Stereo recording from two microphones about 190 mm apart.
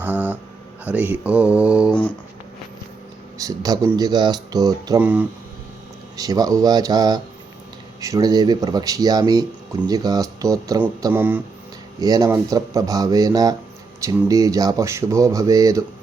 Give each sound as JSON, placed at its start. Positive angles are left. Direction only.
{"t": 0.0, "sound": "a sound", "side_deg": -10}
{"t": 0.9, "sound": "speech", "side_deg": -10}
{"t": 3.4, "sound": "speech", "side_deg": -20}
{"t": 4.9, "sound": "speech", "side_deg": -10}
{"t": 6.1, "sound": "speech", "side_deg": -20}
{"t": 11.9, "sound": "speech", "side_deg": -20}